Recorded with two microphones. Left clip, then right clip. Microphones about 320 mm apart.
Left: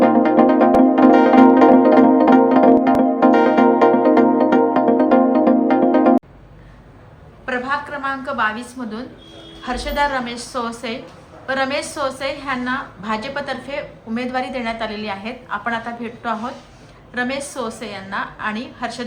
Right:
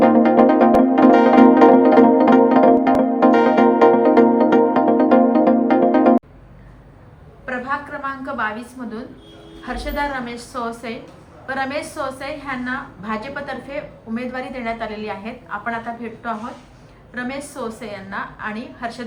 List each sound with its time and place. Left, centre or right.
0.0 s music: centre
7.4 s a sound: centre
9.6 s a woman's voice: centre